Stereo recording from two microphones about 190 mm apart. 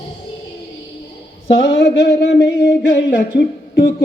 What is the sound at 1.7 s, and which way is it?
Mantra, 65° left (ahead or behind).